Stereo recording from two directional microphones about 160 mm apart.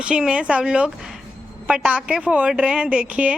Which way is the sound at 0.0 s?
5° right (ahead or behind).